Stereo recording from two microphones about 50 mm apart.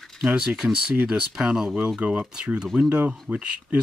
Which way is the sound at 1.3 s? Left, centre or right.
Centre.